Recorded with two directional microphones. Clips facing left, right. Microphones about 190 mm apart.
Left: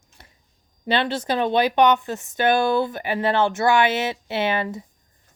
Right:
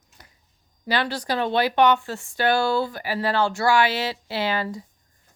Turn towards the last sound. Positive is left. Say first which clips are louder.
# left 2 dB
turn(degrees=20)  # may be behind; listen again after turning